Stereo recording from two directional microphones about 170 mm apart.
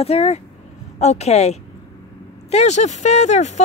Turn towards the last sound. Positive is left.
turn(degrees=40)  # may be behind; listen again after turning